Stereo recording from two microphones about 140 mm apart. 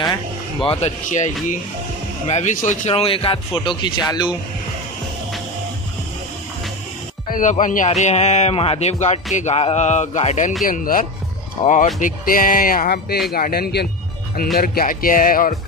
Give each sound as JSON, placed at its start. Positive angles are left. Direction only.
{"t": 0.7, "sound": "speech", "side_deg": 50}
{"t": 3.0, "sound": "a man's voice", "side_deg": 40}
{"t": 7.2, "sound": "speech", "side_deg": 75}
{"t": 7.5, "sound": "speech", "side_deg": 60}
{"t": 10.6, "sound": "speech", "side_deg": 80}
{"t": 11.6, "sound": "speech", "side_deg": 60}